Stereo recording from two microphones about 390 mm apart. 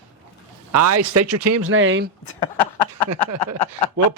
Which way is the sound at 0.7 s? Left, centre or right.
Right.